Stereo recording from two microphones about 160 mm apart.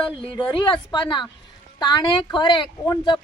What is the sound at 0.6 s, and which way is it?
A woman's voice, 30° left (ahead or behind).